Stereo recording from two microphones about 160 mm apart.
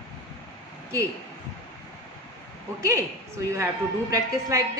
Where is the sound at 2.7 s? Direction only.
20° right (ahead or behind).